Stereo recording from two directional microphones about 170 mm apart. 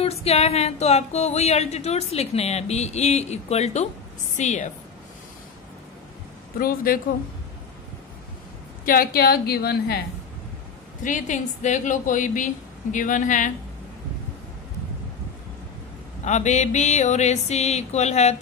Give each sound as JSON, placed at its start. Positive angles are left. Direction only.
{"t": 0.0, "sound": "a sound", "side_deg": 35}
{"t": 4.4, "sound": "a woman's voice", "side_deg": 45}
{"t": 6.6, "sound": "speech", "side_deg": 60}
{"t": 8.8, "sound": "a woman's voice", "side_deg": 60}
{"t": 11.1, "sound": "a woman's voice", "side_deg": 45}
{"t": 16.3, "sound": "a sound", "side_deg": 45}